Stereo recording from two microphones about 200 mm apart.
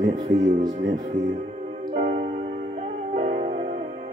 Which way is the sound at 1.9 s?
35° right (ahead or behind).